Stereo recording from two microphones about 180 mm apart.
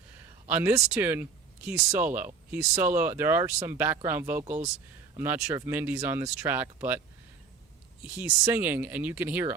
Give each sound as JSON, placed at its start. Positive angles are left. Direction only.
{"t": 0.4, "sound": "speech", "side_deg": -10}
{"t": 4.4, "sound": "speech", "side_deg": -40}
{"t": 5.1, "sound": "speech", "side_deg": -10}
{"t": 8.0, "sound": "speech", "side_deg": -10}